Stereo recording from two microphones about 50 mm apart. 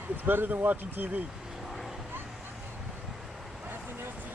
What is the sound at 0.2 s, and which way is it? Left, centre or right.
Speech, right.